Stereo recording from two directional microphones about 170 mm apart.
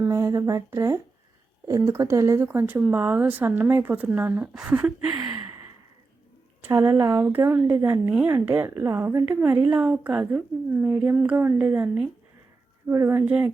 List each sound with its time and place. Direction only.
0.0 s a woman's voice: 20° right (ahead or behind)
5.1 s a sound: 20° right (ahead or behind)
6.6 s a woman's voice: 15° right (ahead or behind)